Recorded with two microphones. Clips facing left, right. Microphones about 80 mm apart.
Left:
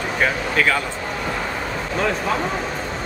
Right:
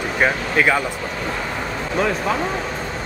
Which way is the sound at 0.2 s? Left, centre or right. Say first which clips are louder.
Right 2 dB; centre.